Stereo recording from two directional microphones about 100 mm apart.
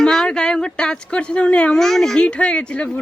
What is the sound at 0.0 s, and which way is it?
A child's voice, 5° left (ahead or behind).